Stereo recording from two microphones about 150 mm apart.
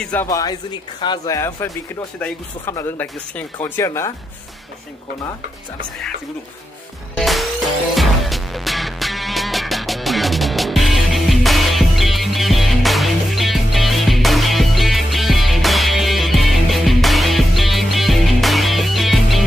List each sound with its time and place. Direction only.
0.0 s speech: 10° left (ahead or behind)
0.3 s speech: 25° left (ahead or behind)
7.2 s music: centre (ahead or behind)